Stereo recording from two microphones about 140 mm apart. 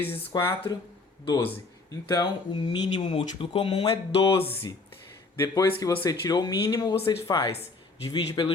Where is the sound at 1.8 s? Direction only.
30° left (ahead or behind).